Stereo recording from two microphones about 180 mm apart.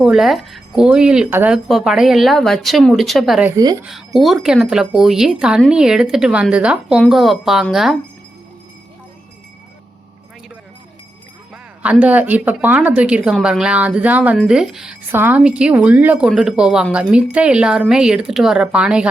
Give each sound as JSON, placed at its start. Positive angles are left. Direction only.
{"t": 0.0, "sound": "a woman's voice", "side_deg": 0}
{"t": 3.5, "sound": "speech", "side_deg": -20}
{"t": 3.8, "sound": "a woman's voice", "side_deg": 0}
{"t": 11.5, "sound": "a woman's voice", "side_deg": -5}